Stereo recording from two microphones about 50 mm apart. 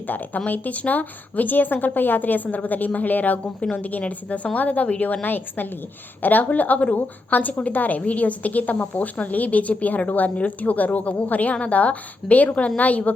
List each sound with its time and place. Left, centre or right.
0.1 s a woman's voice: left